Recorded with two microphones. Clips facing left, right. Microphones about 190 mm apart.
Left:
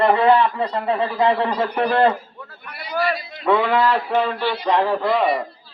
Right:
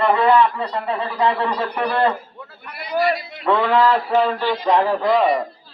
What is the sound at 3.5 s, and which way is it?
Mantra, 5° left (ahead or behind).